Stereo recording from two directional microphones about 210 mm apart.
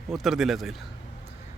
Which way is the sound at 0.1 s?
Centre (ahead or behind).